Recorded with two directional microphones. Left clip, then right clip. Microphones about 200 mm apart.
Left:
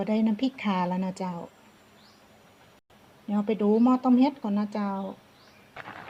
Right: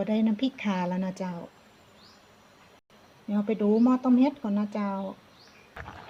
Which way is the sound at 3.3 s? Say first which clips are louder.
Left 1 dB; 5° left (ahead or behind).